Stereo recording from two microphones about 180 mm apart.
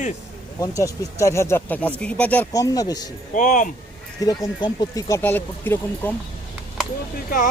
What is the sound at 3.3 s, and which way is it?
Speech, 45° left (ahead or behind).